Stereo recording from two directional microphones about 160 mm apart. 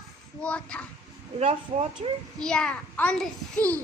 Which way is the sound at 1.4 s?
40° right (ahead or behind).